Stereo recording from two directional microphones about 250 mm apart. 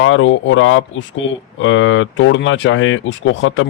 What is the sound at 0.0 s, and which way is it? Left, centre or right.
Speech, left.